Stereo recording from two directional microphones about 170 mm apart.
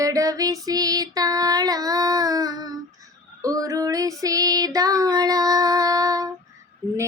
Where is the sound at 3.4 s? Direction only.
20° right (ahead or behind).